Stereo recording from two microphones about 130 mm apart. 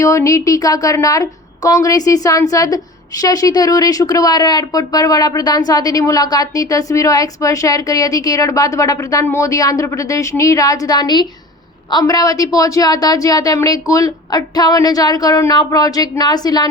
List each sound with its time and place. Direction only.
0.0 s a woman's voice: 25° left (ahead or behind)